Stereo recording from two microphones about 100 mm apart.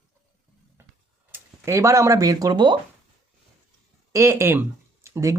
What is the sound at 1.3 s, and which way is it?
Speech, 30° right (ahead or behind).